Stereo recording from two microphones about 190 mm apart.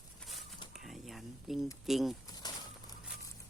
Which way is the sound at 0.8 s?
Centre (ahead or behind).